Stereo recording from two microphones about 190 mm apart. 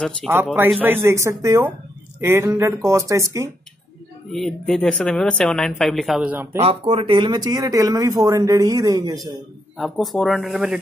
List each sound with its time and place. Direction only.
0.5 s speech: 5° right (ahead or behind)
4.3 s speech: centre (ahead or behind)
6.6 s speech: 30° right (ahead or behind)
9.8 s speech: centre (ahead or behind)